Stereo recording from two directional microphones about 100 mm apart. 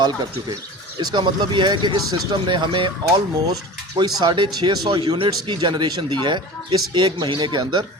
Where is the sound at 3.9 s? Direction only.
50° right (ahead or behind).